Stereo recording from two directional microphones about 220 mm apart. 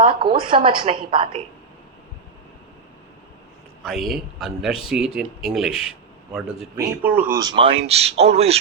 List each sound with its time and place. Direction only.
0.0 s speech: 25° right (ahead or behind)
3.8 s speech: centre (ahead or behind); by 8.5 s 30° right (ahead or behind)